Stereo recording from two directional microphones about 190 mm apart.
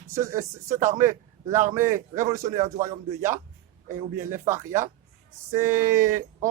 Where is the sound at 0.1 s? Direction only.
15° right (ahead or behind).